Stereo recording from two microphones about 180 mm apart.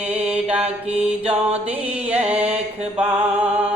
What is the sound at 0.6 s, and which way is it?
Mantra, 35° right (ahead or behind).